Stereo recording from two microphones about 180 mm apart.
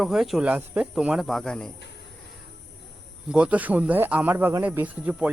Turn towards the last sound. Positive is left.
turn(degrees=-10)  # may be behind; listen again after turning